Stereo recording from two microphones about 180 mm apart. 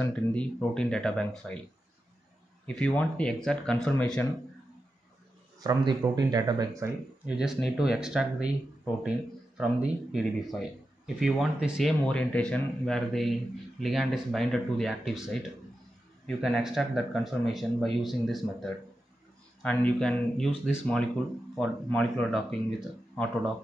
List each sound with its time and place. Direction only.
0.0 s speech: 5° left (ahead or behind)
2.6 s speech: 5° left (ahead or behind)
5.6 s speech: 20° right (ahead or behind)
7.2 s speech: 5° right (ahead or behind)
9.6 s speech: 5° right (ahead or behind)